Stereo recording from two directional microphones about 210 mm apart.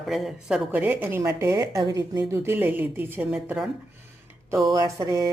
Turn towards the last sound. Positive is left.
turn(degrees=-15)  # may be behind; listen again after turning